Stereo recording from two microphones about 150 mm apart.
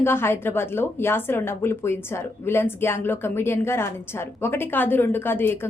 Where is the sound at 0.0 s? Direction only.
15° left (ahead or behind).